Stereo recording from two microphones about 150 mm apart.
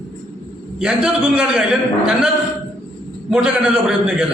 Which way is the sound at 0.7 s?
5° right (ahead or behind).